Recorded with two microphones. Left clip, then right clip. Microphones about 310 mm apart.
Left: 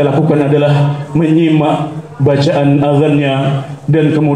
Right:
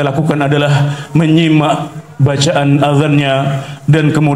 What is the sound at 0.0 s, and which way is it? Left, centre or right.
A man's voice, right.